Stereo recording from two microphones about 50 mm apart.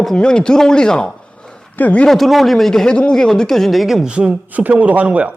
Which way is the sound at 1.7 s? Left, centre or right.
Left.